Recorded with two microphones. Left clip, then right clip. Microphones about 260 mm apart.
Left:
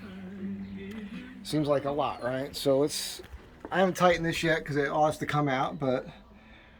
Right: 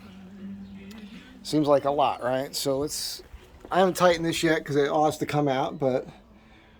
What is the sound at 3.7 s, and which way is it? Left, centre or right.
Speech, right.